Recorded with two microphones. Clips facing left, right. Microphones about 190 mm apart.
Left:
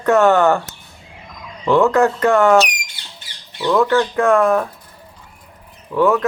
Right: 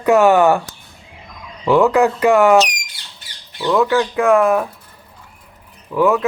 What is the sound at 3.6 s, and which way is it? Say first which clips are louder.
Speech: even; 5° right (ahead or behind).